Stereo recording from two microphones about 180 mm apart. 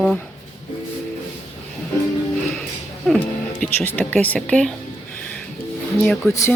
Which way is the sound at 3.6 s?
10° left (ahead or behind).